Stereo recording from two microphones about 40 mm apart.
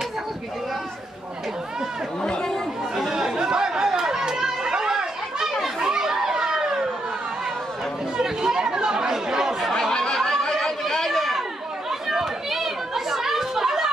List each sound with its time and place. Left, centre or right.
3.0 s chatter: centre
5.5 s children playing: centre
5.9 s children playing: centre
8.2 s chatter: centre
9.9 s snicker: centre
11.1 s chatter: centre